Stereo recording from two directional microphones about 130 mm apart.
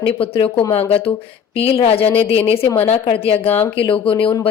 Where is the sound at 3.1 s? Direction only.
50° left (ahead or behind).